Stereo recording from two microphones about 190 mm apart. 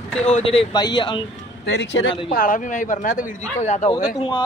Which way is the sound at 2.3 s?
45° left (ahead or behind).